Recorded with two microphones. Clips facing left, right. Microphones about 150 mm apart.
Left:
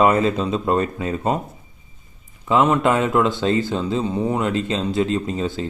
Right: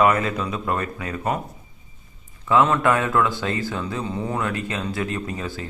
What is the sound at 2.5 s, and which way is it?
Speech, 20° left (ahead or behind).